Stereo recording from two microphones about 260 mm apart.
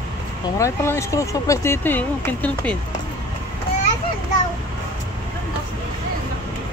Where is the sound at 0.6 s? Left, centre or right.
Centre.